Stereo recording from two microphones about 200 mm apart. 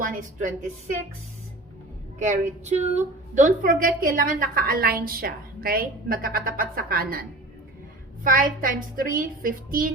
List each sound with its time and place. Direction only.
0.0 s a woman's voice: 40° right (ahead or behind)
2.1 s a woman's voice: 40° right (ahead or behind)